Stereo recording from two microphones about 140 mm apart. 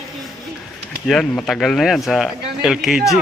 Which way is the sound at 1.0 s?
5° left (ahead or behind).